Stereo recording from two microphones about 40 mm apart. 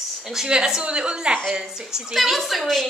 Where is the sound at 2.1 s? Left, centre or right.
Centre.